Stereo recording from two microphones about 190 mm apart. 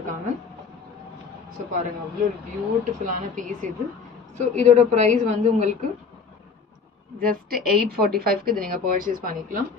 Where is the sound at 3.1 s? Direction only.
45° right (ahead or behind).